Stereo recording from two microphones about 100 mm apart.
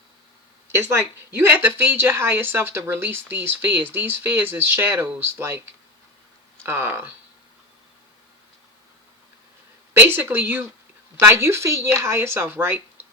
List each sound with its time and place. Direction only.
0.7 s speech: 25° right (ahead or behind)
6.6 s speech: 25° right (ahead or behind)
9.9 s speech: 20° right (ahead or behind)